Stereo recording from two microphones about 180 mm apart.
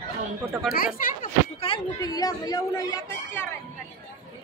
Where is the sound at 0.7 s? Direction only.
50° left (ahead or behind).